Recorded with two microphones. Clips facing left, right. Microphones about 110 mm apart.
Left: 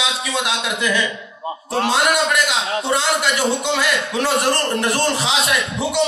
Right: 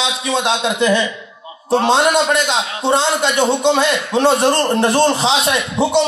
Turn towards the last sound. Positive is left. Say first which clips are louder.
# right 5 dB
turn(degrees=-30)  # may be behind; listen again after turning